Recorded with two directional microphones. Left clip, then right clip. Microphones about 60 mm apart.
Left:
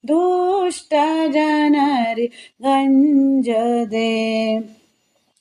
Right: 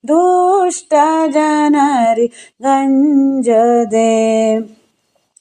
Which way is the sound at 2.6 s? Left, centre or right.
Right.